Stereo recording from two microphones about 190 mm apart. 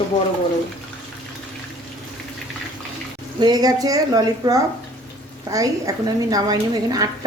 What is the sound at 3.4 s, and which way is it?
A woman's voice, 20° right (ahead or behind).